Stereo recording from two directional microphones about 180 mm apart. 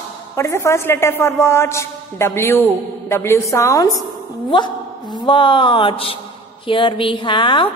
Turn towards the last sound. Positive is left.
turn(degrees=25)  # may be behind; listen again after turning